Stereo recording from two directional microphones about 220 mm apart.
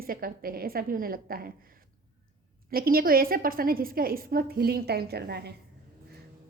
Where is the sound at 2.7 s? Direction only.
40° right (ahead or behind).